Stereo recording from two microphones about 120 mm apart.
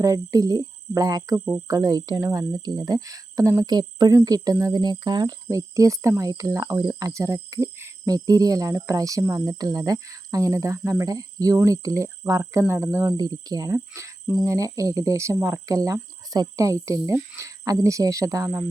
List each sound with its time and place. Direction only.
0.0 s speech: 30° right (ahead or behind)